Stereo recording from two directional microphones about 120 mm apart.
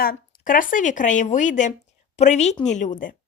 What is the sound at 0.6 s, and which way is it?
Speech, 90° left.